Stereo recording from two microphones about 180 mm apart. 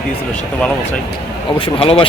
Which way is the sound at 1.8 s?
30° left (ahead or behind).